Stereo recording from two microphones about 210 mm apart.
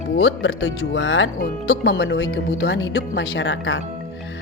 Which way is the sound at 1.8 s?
55° left (ahead or behind).